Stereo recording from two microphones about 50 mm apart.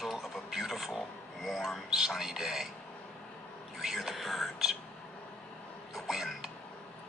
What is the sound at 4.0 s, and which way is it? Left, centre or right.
Speech, centre.